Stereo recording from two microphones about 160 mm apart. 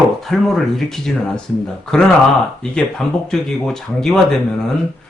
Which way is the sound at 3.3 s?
5° left (ahead or behind).